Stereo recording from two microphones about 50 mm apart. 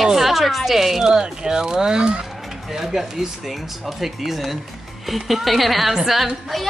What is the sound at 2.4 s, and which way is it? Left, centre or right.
Speech, centre.